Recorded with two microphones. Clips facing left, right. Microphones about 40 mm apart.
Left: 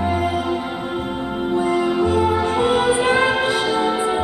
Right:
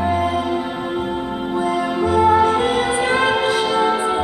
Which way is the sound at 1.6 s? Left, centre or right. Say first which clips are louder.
Left 1 dB; centre.